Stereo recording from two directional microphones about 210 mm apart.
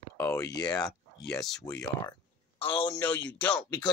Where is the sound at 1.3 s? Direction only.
Centre (ahead or behind).